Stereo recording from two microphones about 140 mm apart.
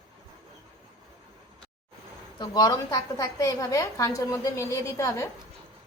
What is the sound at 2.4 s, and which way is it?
A woman's voice, 25° left (ahead or behind).